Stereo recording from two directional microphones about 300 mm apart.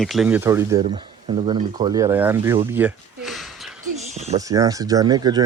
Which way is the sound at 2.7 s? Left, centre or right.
Centre.